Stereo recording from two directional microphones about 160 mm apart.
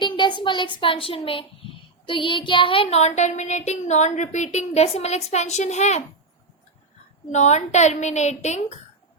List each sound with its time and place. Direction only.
0.0 s a child's voice: 30° left (ahead or behind); by 6.0 s 45° left (ahead or behind)
7.3 s a woman's voice: 45° left (ahead or behind)